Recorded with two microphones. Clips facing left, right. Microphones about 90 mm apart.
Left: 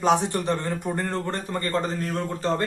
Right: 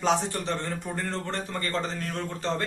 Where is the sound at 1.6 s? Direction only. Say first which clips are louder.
Left 5 dB; 45° left (ahead or behind).